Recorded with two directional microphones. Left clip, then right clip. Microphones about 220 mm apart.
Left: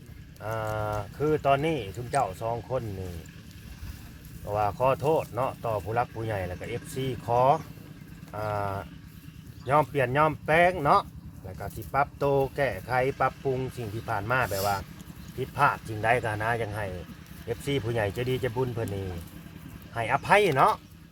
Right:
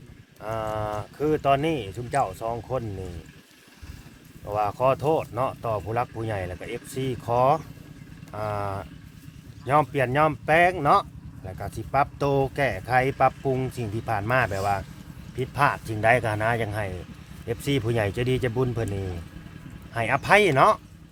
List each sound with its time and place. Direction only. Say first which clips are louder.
0.4 s speech: right 2 dB; 45° right (ahead or behind)
4.4 s speech: right 2 dB; 40° right (ahead or behind)